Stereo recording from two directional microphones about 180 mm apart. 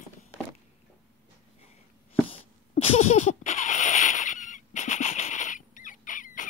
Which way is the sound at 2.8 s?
40° left (ahead or behind).